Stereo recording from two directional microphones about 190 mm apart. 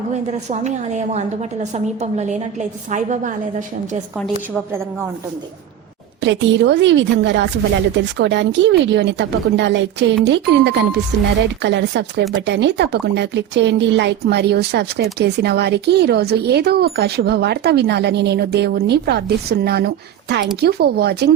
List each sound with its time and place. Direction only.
0.1 s a woman's voice: 40° right (ahead or behind)
6.2 s a woman's voice: 70° right (ahead or behind)